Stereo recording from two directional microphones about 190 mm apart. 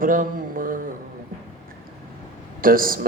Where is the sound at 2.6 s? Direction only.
50° right (ahead or behind).